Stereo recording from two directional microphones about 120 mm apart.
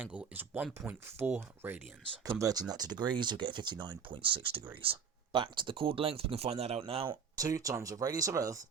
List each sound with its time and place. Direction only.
0.0 s speech: 10° right (ahead or behind)
2.2 s speech: 30° right (ahead or behind); by 7.2 s 50° right (ahead or behind)
7.3 s speech: 30° right (ahead or behind)